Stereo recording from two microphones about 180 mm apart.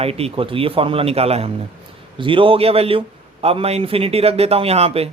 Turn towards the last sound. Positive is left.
turn(degrees=-35)  # may be behind; listen again after turning